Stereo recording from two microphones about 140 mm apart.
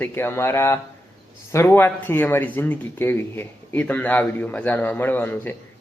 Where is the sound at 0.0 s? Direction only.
15° left (ahead or behind).